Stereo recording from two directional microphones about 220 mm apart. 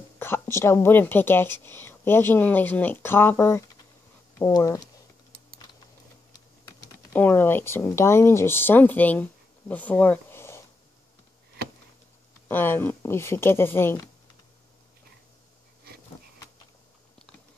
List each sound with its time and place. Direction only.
0.2 s speech: 10° left (ahead or behind)
6.3 s speech: 15° left (ahead or behind)
12.4 s speech: 10° left (ahead or behind)